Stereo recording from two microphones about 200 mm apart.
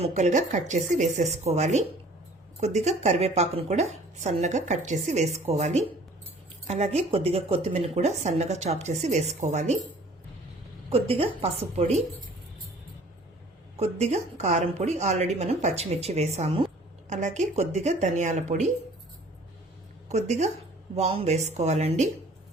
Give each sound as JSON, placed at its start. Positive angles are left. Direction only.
{"t": 0.0, "sound": "speech", "side_deg": -35}
{"t": 10.8, "sound": "a woman's voice", "side_deg": -30}
{"t": 13.7, "sound": "speech", "side_deg": -30}
{"t": 20.1, "sound": "a woman's voice", "side_deg": -35}